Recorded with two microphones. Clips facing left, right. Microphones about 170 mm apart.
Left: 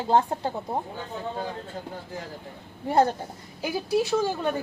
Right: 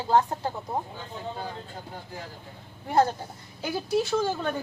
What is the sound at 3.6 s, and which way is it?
Speech, 5° left (ahead or behind).